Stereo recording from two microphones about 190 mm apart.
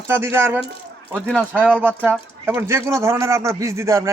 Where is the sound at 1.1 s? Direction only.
Centre (ahead or behind); by 4.1 s 15° right (ahead or behind).